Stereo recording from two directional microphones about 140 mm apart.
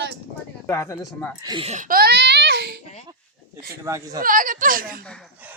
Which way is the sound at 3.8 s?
25° right (ahead or behind).